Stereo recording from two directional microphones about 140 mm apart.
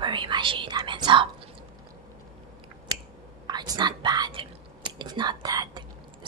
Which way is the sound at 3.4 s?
30° right (ahead or behind).